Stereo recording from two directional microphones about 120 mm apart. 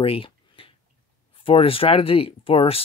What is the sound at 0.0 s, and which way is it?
Speech, 50° left (ahead or behind).